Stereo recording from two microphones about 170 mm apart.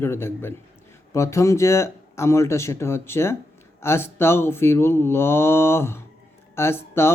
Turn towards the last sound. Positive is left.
turn(degrees=15)  # may be behind; listen again after turning